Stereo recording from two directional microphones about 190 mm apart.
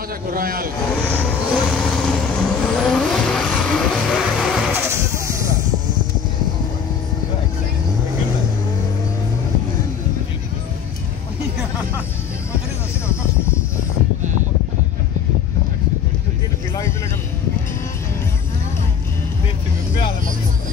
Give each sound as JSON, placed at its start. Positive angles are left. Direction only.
{"t": 0.3, "sound": "speech", "side_deg": -50}
{"t": 0.9, "sound": "vehicle", "side_deg": 5}
{"t": 4.7, "sound": "a sound", "side_deg": -15}